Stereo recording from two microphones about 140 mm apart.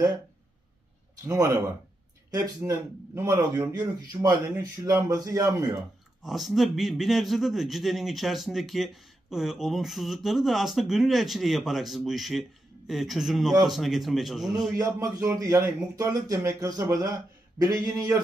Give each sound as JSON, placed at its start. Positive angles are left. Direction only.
{"t": 1.3, "sound": "speech", "side_deg": -25}
{"t": 6.2, "sound": "a man's voice", "side_deg": 0}
{"t": 14.8, "sound": "speech", "side_deg": -25}